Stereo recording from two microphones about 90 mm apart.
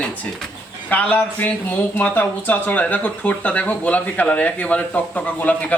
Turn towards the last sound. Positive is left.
turn(degrees=15)  # may be behind; listen again after turning